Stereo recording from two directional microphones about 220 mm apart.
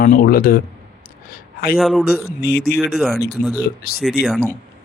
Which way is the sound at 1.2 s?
40° left (ahead or behind).